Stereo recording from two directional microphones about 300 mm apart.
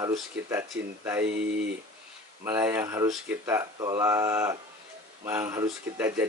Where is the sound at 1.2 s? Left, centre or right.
Right.